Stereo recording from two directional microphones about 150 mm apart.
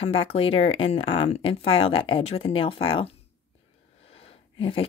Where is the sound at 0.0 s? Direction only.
40° left (ahead or behind).